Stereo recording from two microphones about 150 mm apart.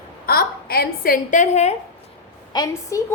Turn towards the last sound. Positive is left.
turn(degrees=25)  # may be behind; listen again after turning